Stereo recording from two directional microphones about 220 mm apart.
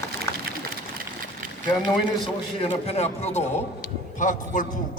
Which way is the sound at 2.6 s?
25° left (ahead or behind).